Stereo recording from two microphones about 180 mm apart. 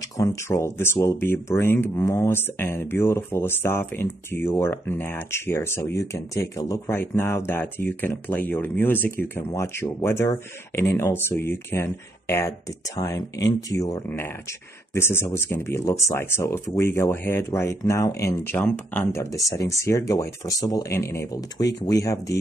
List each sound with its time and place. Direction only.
0.2 s speech: 15° left (ahead or behind)